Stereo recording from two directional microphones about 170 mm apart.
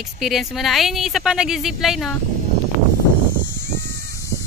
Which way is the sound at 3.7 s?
80° right.